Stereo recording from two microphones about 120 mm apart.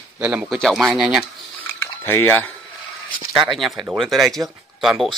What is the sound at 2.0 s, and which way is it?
Speech, 20° left (ahead or behind).